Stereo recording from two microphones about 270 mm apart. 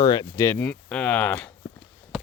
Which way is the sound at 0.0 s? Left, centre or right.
Centre.